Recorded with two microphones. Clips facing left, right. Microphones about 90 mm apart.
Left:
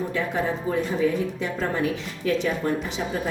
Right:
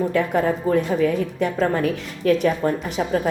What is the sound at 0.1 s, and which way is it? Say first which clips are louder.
A woman's voice: right 6 dB; 55° right (ahead or behind).